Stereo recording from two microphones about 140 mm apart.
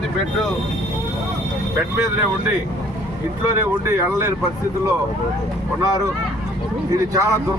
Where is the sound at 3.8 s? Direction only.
20° right (ahead or behind).